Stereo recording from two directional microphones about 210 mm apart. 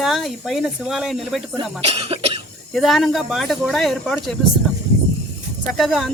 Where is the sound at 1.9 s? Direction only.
30° right (ahead or behind).